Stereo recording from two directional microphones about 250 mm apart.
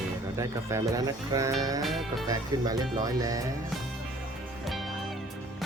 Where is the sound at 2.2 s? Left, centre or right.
Centre.